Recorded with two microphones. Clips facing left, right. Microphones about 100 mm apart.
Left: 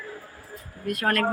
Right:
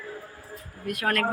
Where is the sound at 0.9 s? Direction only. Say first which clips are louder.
Left 2 dB; centre (ahead or behind).